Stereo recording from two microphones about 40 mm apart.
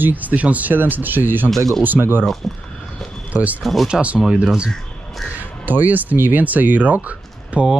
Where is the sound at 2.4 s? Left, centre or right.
Centre.